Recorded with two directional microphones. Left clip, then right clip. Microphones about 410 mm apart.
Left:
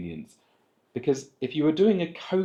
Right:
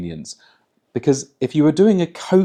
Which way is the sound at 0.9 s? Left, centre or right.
Right.